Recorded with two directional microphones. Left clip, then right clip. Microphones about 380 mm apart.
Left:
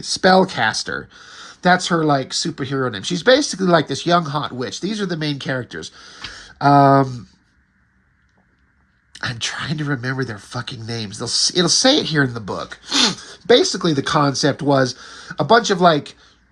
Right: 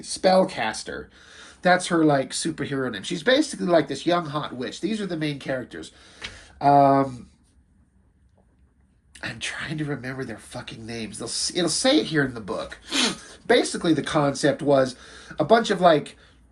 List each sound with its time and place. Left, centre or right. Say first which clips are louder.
0.0 s speech: left 5 dB; left
9.1 s speech: left 7 dB; centre